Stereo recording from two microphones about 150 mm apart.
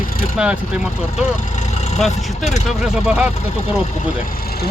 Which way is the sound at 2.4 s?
50° left (ahead or behind).